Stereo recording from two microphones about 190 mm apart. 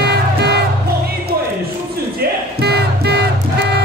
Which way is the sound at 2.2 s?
60° right (ahead or behind).